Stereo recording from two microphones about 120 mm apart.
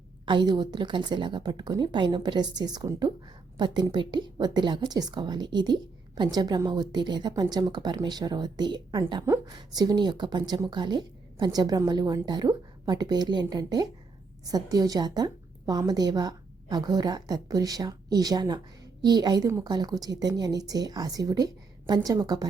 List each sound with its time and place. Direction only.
0.3 s a woman's voice: 40° right (ahead or behind)